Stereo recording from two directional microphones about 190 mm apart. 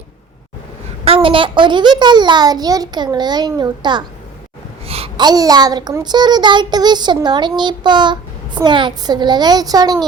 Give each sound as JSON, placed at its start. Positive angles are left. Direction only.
{"t": 1.0, "sound": "a child's voice", "side_deg": -30}